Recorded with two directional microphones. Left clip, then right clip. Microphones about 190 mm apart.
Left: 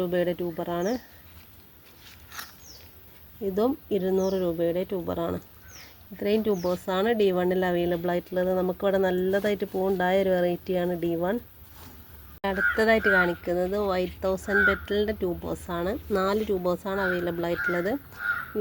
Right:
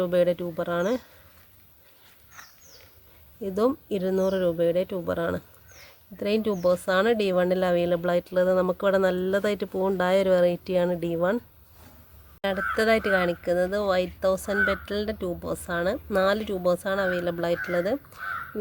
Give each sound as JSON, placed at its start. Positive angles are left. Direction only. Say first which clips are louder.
{"t": 0.0, "sound": "speech", "louder": "right 4 dB", "side_deg": -20}
{"t": 3.4, "sound": "speech", "louder": "right 1 dB", "side_deg": -20}
{"t": 12.4, "sound": "speech", "louder": "left 1 dB", "side_deg": -15}